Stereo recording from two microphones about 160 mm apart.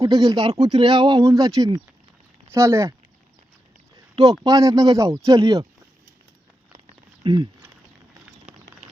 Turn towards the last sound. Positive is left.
turn(degrees=-30)  # may be behind; listen again after turning